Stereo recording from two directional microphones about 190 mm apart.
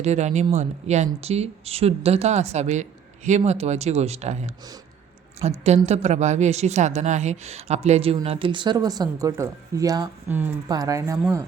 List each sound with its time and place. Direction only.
0.0 s a woman's voice: 35° right (ahead or behind); by 11.4 s 15° right (ahead or behind)